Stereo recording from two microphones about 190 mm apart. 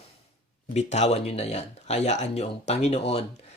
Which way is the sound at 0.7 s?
35° left (ahead or behind).